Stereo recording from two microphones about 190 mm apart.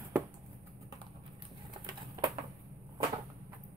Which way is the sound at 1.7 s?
25° right (ahead or behind).